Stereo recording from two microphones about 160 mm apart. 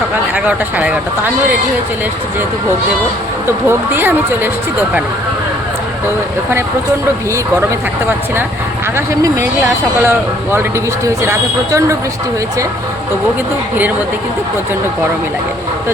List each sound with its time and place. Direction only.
0.3 s speech: 10° right (ahead or behind)
3.7 s speech: 15° right (ahead or behind)
9.0 s speech: 20° right (ahead or behind)